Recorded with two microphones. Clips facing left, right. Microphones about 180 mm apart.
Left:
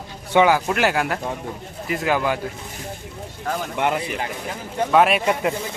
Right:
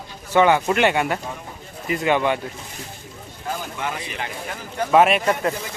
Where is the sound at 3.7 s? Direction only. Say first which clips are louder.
Left 7 dB; 65° left (ahead or behind).